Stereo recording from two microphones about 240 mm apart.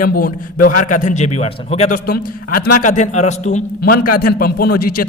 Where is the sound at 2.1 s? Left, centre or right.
Left.